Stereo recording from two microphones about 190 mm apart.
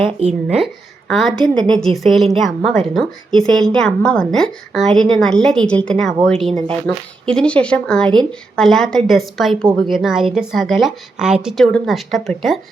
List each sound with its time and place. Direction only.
0.0 s speech: 30° right (ahead or behind)
0.4 s a woman's voice: centre (ahead or behind)